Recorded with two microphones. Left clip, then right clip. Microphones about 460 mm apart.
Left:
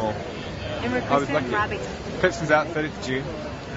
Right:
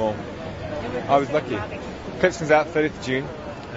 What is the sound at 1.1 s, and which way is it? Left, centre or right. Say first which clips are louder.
A man's voice: right 4 dB; right.